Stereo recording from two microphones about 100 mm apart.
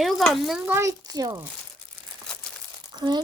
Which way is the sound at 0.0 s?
Centre (ahead or behind).